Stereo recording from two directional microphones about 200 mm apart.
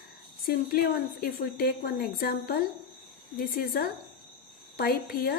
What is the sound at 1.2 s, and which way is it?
Speech, 50° left (ahead or behind).